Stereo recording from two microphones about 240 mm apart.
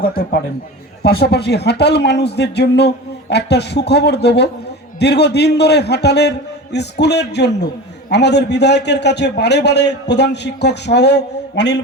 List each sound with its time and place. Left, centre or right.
0.0 s a man's voice: left